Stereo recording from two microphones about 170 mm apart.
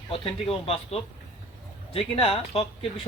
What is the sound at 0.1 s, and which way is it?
Speech, 35° left (ahead or behind).